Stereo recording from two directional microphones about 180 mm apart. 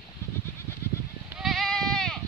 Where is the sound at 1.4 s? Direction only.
Centre (ahead or behind).